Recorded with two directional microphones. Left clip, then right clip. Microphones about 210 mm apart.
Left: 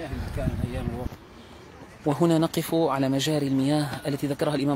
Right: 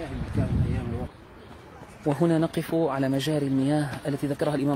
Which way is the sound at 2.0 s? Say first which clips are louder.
Left 1 dB; 15° left (ahead or behind).